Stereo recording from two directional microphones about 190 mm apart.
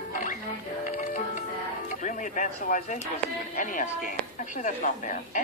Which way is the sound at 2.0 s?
45° left (ahead or behind).